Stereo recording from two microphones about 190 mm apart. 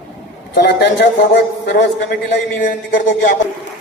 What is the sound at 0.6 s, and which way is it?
A man's voice, 60° left (ahead or behind).